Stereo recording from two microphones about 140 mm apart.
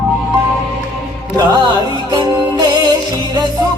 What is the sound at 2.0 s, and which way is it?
Music, 30° right (ahead or behind).